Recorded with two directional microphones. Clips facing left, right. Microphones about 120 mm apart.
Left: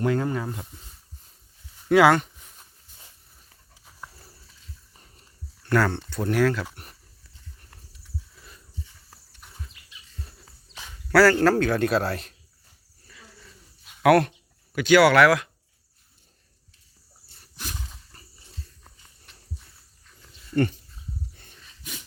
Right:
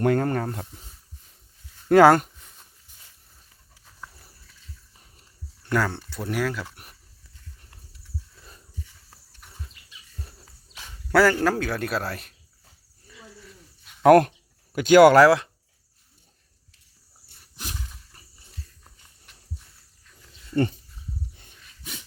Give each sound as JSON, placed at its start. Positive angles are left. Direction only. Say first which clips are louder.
{"t": 0.0, "sound": "speech", "louder": "right 3 dB", "side_deg": -50}
{"t": 1.9, "sound": "speech", "louder": "right 3 dB", "side_deg": -45}
{"t": 5.7, "sound": "speech", "louder": "left 2 dB", "side_deg": -10}
{"t": 9.0, "sound": "horse", "louder": "left 1 dB", "side_deg": 20}
{"t": 11.1, "sound": "speech", "louder": "left 2 dB", "side_deg": -20}
{"t": 11.4, "sound": "speech", "louder": "left 4 dB", "side_deg": -5}
{"t": 14.0, "sound": "speech", "louder": "right 3 dB", "side_deg": -40}